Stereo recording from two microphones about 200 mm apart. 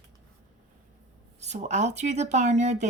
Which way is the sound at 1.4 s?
35° right (ahead or behind).